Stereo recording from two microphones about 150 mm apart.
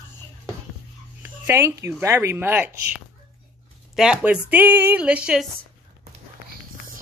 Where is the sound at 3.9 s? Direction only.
5° right (ahead or behind).